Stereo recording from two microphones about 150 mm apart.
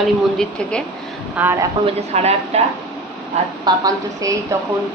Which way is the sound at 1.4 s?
10° right (ahead or behind).